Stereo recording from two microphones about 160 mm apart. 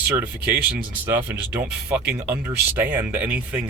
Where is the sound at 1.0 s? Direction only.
15° right (ahead or behind).